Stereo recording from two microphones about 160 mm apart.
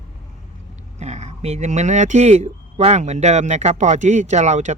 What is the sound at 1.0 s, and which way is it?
Speech, 45° right (ahead or behind).